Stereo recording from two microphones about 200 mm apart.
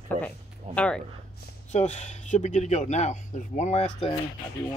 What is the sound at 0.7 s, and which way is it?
Speech, 5° left (ahead or behind).